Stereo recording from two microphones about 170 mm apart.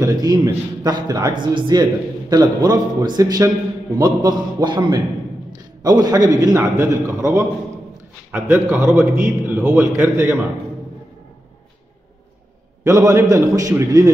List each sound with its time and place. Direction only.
0.0 s a man's voice: 25° right (ahead or behind)
12.8 s a man's voice: 15° right (ahead or behind)